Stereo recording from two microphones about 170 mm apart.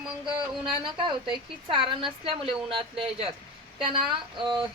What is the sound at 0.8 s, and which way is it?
A woman's voice, 30° right (ahead or behind).